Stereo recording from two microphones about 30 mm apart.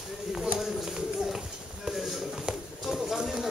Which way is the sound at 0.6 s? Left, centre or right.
Centre.